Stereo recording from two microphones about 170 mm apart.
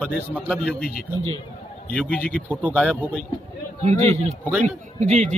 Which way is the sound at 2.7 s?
5° left (ahead or behind).